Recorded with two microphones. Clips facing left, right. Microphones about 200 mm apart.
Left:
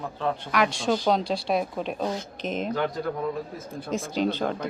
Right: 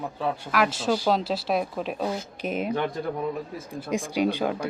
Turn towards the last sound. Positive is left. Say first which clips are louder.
# right 1 dB
turn(degrees=-10)  # may be behind; listen again after turning